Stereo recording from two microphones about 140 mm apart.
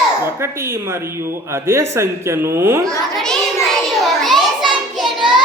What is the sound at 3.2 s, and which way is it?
Child singing, 5° left (ahead or behind).